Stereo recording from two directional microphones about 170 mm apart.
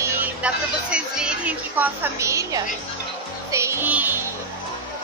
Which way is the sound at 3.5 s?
15° right (ahead or behind).